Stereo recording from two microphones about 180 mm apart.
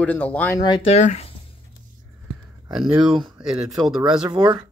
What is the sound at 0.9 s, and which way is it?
Speech, 35° left (ahead or behind).